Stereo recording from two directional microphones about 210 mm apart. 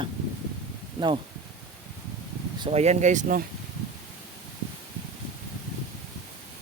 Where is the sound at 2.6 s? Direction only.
30° right (ahead or behind).